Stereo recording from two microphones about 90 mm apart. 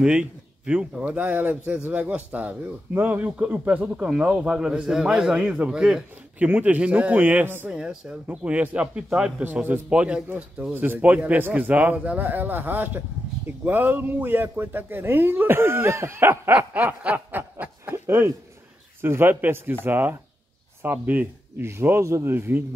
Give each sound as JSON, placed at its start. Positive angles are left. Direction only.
{"t": 0.0, "sound": "a man's voice", "side_deg": -10}
{"t": 17.4, "sound": "snicker", "side_deg": -25}
{"t": 18.9, "sound": "speech", "side_deg": -25}